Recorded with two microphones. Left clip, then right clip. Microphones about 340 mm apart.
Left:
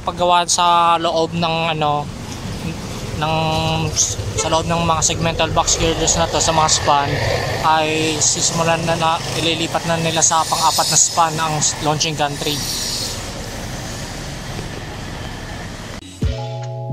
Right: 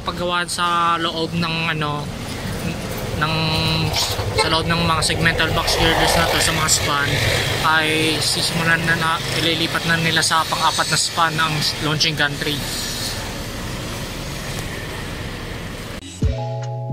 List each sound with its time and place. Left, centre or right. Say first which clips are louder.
0.0 s speech: left 6 dB; centre
3.2 s speech: left 2 dB; centre
8.2 s speech: left 2 dB; left
8.6 s speech: even; centre